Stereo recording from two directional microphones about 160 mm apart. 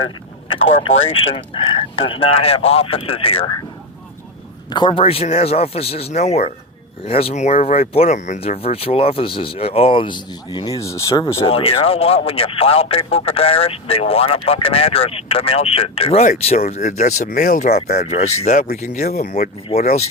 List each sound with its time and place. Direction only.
0.4 s speech: 35° left (ahead or behind)
4.7 s speech: 30° left (ahead or behind)
11.1 s speech: 35° left (ahead or behind)